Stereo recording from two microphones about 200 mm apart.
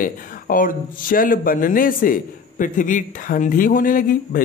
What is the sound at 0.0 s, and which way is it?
Speech, 45° left (ahead or behind).